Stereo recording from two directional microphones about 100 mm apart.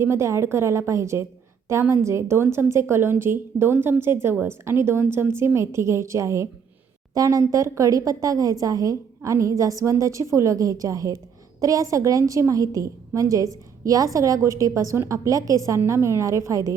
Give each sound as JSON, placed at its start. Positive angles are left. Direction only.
{"t": 0.0, "sound": "a woman's voice", "side_deg": -30}